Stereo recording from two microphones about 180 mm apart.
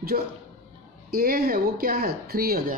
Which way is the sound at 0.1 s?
55° right (ahead or behind).